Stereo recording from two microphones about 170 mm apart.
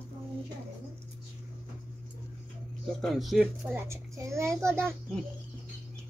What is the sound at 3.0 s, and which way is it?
Speech, centre (ahead or behind).